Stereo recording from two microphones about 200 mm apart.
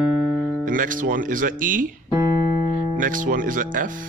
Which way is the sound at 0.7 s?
40° right (ahead or behind).